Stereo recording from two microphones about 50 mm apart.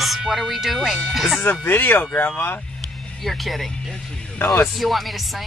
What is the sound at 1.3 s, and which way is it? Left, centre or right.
Speech, left.